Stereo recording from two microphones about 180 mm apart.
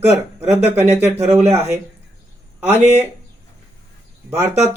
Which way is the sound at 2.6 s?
10° right (ahead or behind).